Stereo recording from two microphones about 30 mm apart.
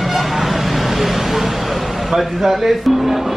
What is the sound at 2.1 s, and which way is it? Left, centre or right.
Speech, centre.